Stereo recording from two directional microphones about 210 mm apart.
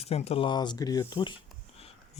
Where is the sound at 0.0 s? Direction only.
30° left (ahead or behind).